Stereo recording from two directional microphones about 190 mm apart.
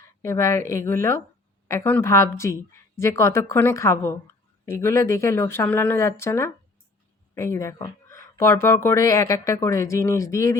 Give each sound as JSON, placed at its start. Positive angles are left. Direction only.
{"t": 0.2, "sound": "speech", "side_deg": 15}